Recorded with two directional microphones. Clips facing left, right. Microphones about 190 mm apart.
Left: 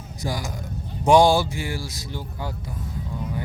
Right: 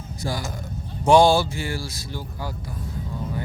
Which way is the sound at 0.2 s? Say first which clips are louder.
Even; 15° left (ahead or behind).